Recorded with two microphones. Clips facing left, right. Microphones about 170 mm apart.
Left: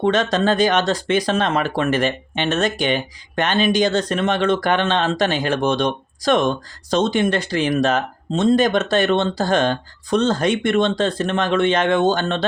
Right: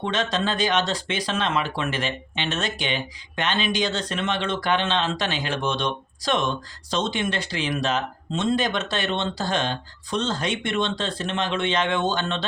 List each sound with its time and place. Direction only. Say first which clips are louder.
0.0 s speech: left 7 dB; 45° left (ahead or behind)